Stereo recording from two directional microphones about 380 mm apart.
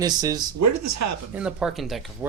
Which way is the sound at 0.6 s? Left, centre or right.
Right.